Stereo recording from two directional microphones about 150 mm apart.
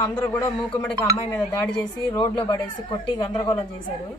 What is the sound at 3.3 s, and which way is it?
Speech, 35° left (ahead or behind).